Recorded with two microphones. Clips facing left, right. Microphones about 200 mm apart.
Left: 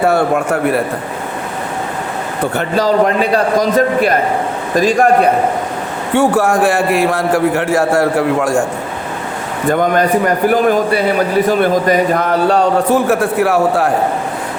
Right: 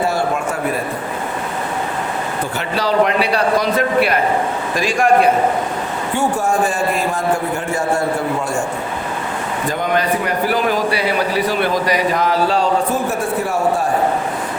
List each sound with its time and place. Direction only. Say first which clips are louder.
0.1 s a man's voice: left 6 dB; 60° left (ahead or behind)
2.6 s a man's voice: left 4 dB; 45° left (ahead or behind)
6.1 s a man's voice: left 6 dB; 90° left
9.6 s a man's voice: left 6 dB; 50° left (ahead or behind); by 13.9 s 65° left (ahead or behind)